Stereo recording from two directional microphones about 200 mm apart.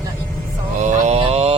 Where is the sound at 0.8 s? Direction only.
35° right (ahead or behind).